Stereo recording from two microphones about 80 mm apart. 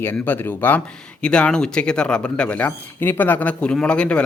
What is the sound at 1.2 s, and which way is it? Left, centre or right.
Speech, centre.